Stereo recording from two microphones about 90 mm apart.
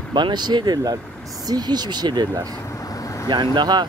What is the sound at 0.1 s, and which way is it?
Speech, 55° right (ahead or behind).